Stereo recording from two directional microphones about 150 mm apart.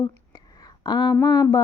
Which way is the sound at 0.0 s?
25° left (ahead or behind).